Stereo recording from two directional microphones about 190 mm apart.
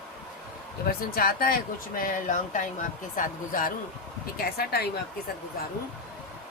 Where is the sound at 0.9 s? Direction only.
50° left (ahead or behind).